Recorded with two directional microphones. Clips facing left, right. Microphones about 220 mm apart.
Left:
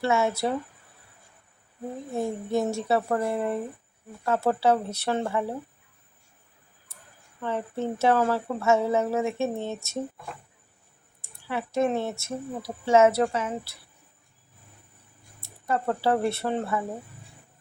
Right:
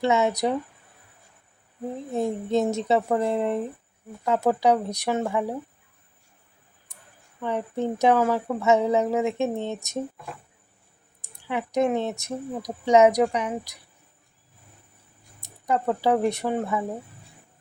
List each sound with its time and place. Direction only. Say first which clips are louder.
0.0 s speech: right 2 dB; 20° right (ahead or behind)
2.1 s speech: right 3 dB; 20° right (ahead or behind)
6.9 s a sound: even; 15° right (ahead or behind)
7.4 s speech: right 2 dB; 15° right (ahead or behind)
11.2 s speech: right 2 dB; 15° right (ahead or behind)
15.4 s speech: right 3 dB; 15° right (ahead or behind)